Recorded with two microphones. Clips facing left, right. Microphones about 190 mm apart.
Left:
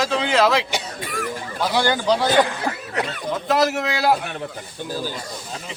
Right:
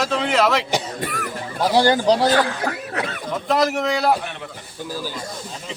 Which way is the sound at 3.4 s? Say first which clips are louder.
Right 1 dB; centre (ahead or behind).